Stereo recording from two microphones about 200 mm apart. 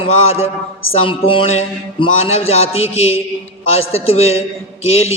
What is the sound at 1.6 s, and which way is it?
Music, 30° left (ahead or behind).